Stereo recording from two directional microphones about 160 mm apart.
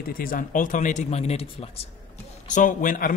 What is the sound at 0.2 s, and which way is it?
Speech, 60° left (ahead or behind).